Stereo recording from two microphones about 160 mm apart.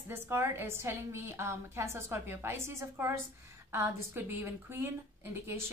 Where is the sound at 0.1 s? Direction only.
15° right (ahead or behind).